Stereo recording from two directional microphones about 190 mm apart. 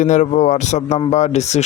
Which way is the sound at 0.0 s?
40° left (ahead or behind).